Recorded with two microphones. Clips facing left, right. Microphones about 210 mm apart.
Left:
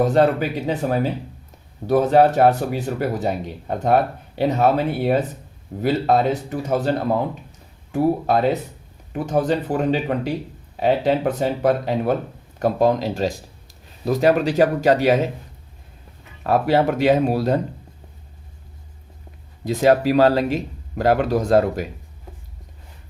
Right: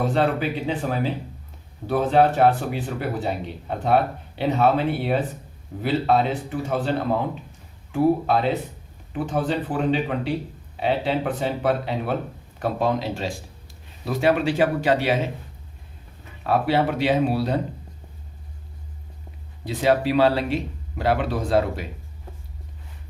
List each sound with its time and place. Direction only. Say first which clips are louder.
0.0 s speech: left 5 dB; 45° left (ahead or behind)
7.9 s speech: left 1 dB; 45° left (ahead or behind)
16.5 s speech: left 3 dB; 45° left (ahead or behind)
19.6 s speech: left 4 dB; 45° left (ahead or behind)